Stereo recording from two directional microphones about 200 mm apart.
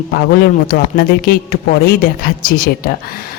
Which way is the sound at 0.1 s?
50° left (ahead or behind).